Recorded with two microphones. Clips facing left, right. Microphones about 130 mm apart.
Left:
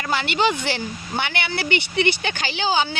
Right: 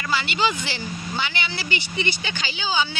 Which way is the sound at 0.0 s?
55° left (ahead or behind).